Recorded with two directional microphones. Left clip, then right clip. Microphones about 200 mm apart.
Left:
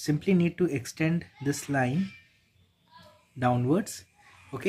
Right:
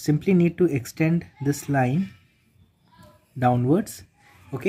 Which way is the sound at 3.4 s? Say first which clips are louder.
Right 5 dB; 15° right (ahead or behind).